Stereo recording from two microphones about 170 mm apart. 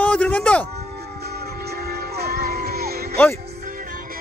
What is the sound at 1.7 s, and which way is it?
Music, 65° right (ahead or behind).